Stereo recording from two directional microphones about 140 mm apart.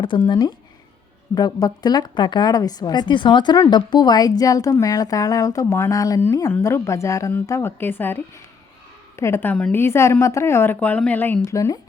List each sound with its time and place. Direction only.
0.3 s a woman's voice: 30° left (ahead or behind)